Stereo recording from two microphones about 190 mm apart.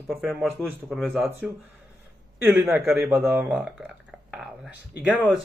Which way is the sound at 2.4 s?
5° right (ahead or behind).